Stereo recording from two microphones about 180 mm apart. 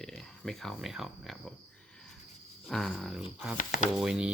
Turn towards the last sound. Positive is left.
turn(degrees=-5)  # may be behind; listen again after turning